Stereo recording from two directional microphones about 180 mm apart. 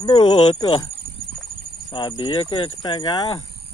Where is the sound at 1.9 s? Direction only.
25° left (ahead or behind).